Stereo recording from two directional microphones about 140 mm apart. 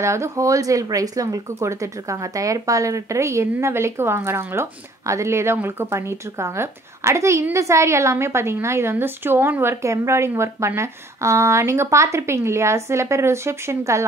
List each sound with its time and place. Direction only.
0.0 s speech: 20° right (ahead or behind)